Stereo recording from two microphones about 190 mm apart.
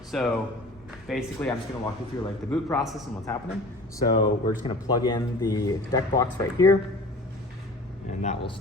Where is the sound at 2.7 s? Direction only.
Centre (ahead or behind).